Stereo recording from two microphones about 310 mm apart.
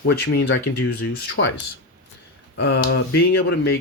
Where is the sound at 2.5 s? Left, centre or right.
Left.